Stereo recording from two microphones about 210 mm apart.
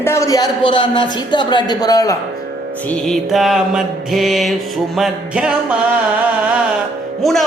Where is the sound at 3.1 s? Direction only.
Centre (ahead or behind).